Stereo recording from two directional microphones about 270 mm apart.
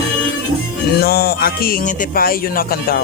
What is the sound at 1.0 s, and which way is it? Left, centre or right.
Speech, left.